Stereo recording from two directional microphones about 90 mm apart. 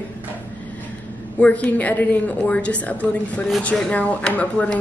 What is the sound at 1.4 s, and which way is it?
A woman's voice, 15° left (ahead or behind).